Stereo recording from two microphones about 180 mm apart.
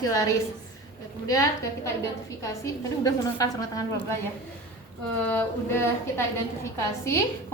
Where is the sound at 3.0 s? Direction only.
20° left (ahead or behind).